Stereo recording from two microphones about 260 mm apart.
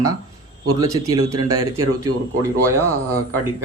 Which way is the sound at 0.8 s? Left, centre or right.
Centre.